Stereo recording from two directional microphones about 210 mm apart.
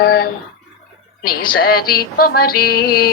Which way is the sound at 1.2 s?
45° left (ahead or behind).